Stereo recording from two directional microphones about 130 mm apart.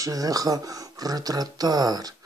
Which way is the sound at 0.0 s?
25° right (ahead or behind).